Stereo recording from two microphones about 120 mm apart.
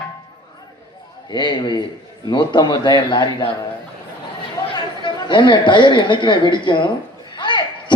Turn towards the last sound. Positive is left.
turn(degrees=40)  # may be behind; listen again after turning